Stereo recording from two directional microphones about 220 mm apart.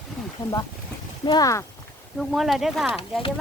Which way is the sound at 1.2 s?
20° left (ahead or behind).